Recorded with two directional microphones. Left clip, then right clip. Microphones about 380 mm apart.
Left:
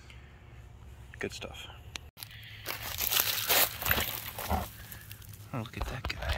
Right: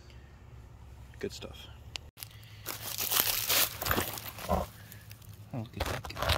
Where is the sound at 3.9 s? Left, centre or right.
Right.